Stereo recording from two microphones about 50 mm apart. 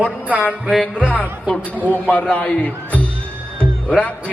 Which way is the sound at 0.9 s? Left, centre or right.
Left.